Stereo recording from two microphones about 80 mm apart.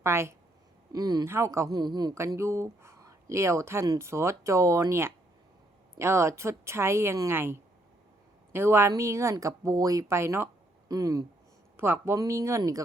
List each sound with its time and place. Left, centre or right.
0.0 s speech: right
0.9 s speech: right
1.2 s speech: right
1.7 s speech: right
2.1 s speech: right
8.5 s speech: right
10.8 s speech: right
11.8 s speech: right
12.1 s speech: right